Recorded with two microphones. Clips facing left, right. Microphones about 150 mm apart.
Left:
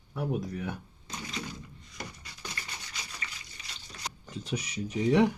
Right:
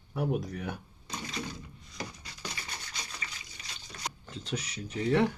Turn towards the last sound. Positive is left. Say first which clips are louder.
# left 3 dB
turn(degrees=15)  # may be behind; listen again after turning